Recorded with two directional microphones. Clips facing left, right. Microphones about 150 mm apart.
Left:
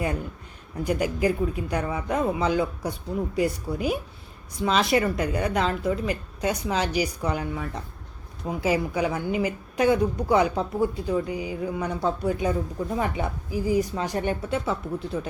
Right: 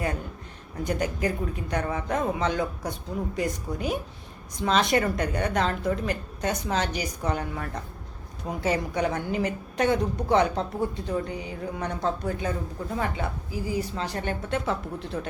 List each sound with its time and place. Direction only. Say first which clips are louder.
0.9 s a woman's voice: left 3 dB; 10° left (ahead or behind)
14.7 s speech: left 2 dB; 5° left (ahead or behind)